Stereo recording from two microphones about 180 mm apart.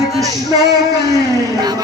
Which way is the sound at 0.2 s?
20° right (ahead or behind).